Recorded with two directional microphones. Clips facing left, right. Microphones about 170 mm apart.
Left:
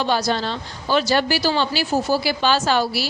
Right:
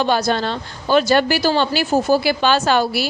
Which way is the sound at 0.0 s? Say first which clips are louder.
Right 3 dB; 55° right (ahead or behind).